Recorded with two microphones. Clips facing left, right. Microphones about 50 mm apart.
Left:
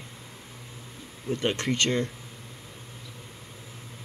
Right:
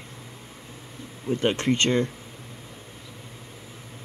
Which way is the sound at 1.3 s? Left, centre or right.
Right.